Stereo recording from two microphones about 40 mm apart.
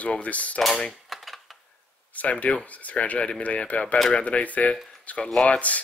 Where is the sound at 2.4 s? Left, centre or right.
Left.